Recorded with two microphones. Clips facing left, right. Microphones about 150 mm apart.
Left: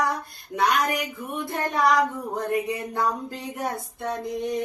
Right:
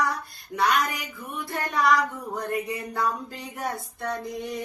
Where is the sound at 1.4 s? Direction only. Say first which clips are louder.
Left 2 dB; 20° left (ahead or behind).